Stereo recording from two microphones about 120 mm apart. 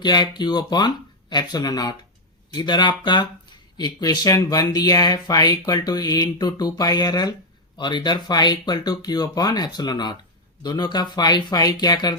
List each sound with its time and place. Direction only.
0.0 s speech: 35° left (ahead or behind)